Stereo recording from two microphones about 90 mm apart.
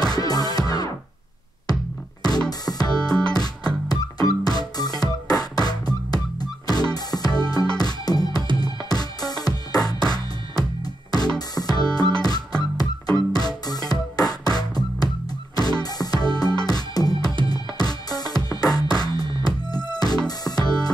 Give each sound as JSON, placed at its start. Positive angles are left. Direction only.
{"t": 0.0, "sound": "music", "side_deg": 45}
{"t": 2.6, "sound": "music", "side_deg": 45}
{"t": 19.0, "sound": "music", "side_deg": -65}
{"t": 19.4, "sound": "music", "side_deg": 50}